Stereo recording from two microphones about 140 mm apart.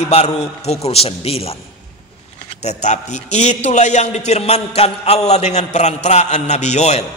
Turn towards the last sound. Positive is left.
turn(degrees=55)  # may be behind; listen again after turning